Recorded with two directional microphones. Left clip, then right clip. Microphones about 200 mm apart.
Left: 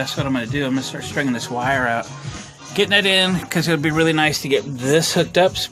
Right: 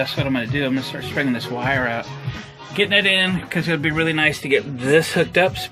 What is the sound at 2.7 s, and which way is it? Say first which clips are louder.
Speech: left 1 dB; 25° left (ahead or behind).